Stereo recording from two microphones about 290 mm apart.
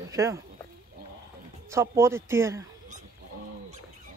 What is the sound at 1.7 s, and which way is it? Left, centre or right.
Speech, centre.